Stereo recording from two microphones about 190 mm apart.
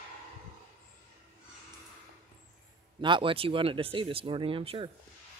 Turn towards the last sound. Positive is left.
turn(degrees=-30)  # may be behind; listen again after turning